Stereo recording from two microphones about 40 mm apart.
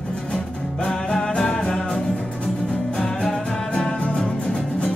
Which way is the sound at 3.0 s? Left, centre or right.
Centre.